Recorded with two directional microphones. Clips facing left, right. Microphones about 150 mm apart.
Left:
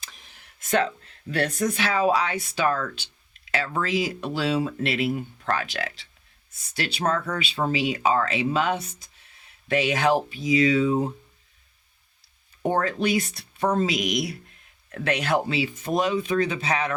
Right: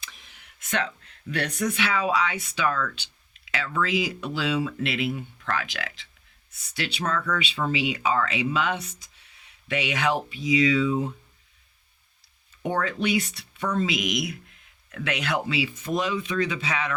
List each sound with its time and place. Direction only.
0.6 s speech: 45° left (ahead or behind)
12.6 s speech: 40° left (ahead or behind)